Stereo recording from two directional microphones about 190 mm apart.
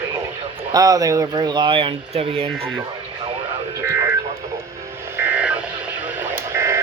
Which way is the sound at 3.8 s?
10° right (ahead or behind).